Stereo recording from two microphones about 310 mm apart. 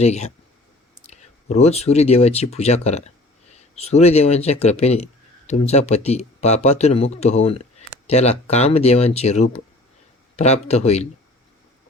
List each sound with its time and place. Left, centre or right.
0.0 s speech: left